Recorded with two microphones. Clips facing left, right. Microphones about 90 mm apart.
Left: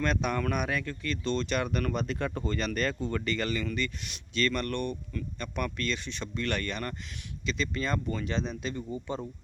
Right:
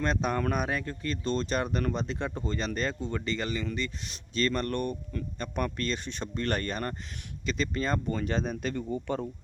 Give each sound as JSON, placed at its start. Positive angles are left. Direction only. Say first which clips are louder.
{"t": 0.0, "sound": "speech", "louder": "right 1 dB", "side_deg": -30}